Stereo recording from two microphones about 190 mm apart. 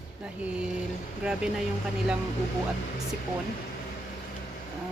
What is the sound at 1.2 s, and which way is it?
Speech, 5° right (ahead or behind).